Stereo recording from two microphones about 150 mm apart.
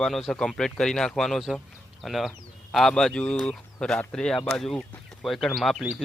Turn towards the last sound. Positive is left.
turn(degrees=0)  # may be behind; listen again after turning